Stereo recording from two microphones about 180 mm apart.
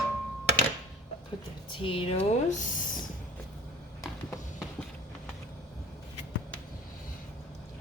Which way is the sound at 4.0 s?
20° left (ahead or behind).